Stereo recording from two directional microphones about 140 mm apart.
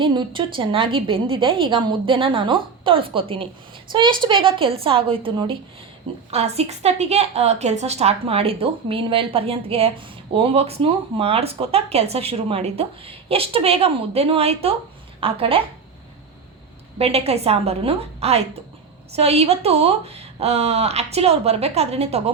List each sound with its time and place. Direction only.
0.0 s a woman's voice: 35° right (ahead or behind)
17.0 s speech: 45° right (ahead or behind)